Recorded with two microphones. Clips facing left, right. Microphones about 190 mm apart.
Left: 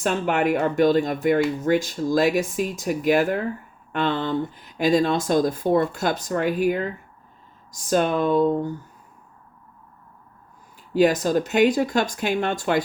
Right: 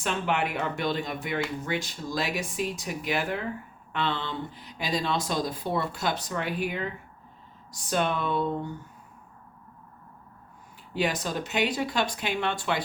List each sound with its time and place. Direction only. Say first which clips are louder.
0.0 s speech: left 6 dB; 45° left (ahead or behind)
10.9 s speech: left 10 dB; 45° left (ahead or behind)